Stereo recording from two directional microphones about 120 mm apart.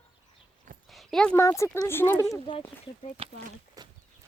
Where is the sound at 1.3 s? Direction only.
25° left (ahead or behind).